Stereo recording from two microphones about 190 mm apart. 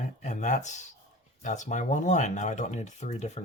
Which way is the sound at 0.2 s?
40° left (ahead or behind).